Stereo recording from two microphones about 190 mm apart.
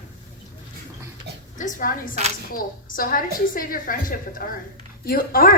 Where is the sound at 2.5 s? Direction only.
50° left (ahead or behind).